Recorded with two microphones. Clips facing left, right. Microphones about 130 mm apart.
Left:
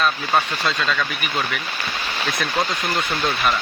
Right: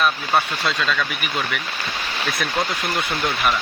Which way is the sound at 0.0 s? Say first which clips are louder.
Even; 5° right (ahead or behind).